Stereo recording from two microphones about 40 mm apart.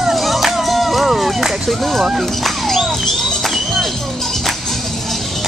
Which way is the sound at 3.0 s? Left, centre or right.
Centre.